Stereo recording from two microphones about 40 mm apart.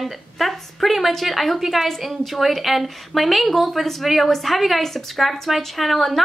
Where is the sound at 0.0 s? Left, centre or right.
Centre.